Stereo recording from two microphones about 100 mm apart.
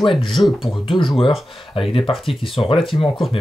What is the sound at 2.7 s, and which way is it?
Speech, centre (ahead or behind).